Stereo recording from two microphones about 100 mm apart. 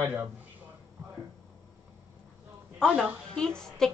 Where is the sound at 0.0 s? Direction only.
20° right (ahead or behind).